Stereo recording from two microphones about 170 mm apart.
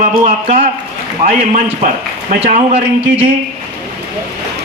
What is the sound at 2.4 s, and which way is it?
Speech, 35° right (ahead or behind).